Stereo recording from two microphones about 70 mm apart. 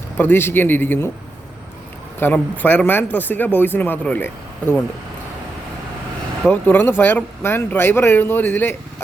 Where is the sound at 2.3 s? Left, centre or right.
Left.